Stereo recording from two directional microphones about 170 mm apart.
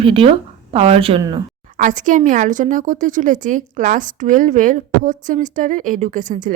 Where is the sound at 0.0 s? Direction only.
30° right (ahead or behind).